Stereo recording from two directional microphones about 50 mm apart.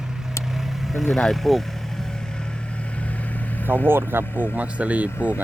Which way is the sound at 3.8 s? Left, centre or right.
Right.